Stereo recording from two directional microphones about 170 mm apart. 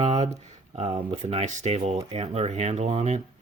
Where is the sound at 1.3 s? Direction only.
40° right (ahead or behind).